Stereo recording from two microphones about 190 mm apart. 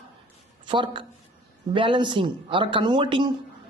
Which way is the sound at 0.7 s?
25° right (ahead or behind).